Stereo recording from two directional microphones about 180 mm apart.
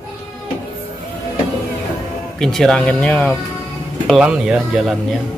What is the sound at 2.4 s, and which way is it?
Speech, centre (ahead or behind).